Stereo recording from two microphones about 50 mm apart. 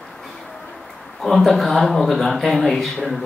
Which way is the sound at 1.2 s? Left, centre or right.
Centre.